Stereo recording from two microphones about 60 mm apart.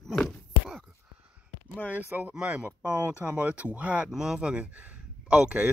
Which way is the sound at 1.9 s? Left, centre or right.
Right.